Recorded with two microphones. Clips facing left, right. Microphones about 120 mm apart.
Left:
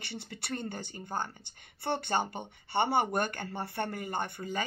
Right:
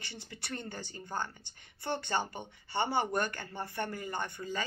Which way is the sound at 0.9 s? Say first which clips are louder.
Even; 15° left (ahead or behind).